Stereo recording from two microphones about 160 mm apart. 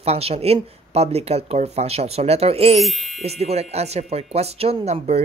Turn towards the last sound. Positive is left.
turn(degrees=-40)  # may be behind; listen again after turning